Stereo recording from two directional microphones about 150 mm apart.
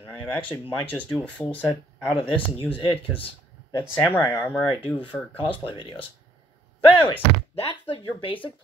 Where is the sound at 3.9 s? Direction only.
15° left (ahead or behind).